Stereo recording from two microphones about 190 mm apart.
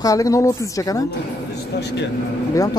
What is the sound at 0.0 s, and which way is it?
Speech, 20° left (ahead or behind).